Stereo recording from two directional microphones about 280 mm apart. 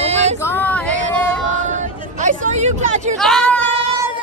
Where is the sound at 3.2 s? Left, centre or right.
Centre.